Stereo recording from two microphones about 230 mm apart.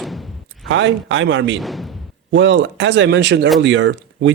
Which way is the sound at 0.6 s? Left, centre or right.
Right.